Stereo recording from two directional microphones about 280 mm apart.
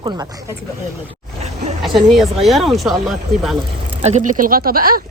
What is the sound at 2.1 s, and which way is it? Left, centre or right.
Speech, centre.